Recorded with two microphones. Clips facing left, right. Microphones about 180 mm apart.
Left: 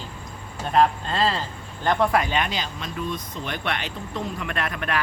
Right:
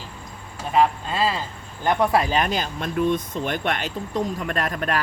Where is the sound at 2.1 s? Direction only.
40° right (ahead or behind).